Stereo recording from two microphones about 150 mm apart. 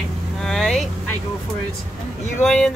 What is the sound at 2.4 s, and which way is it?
Speech, 5° left (ahead or behind).